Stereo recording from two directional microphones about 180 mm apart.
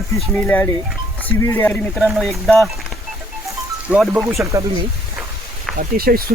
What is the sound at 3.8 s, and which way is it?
Speech, 5° right (ahead or behind).